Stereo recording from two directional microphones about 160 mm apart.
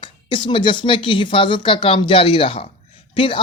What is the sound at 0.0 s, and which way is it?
Speech, 30° left (ahead or behind).